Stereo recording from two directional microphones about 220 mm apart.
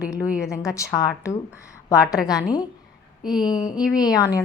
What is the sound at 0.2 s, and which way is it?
Speech, 5° right (ahead or behind).